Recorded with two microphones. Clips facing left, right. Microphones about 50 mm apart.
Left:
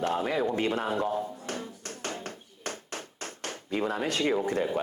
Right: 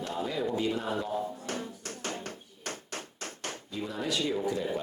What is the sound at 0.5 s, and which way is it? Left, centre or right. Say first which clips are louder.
Speech: left 2 dB; left.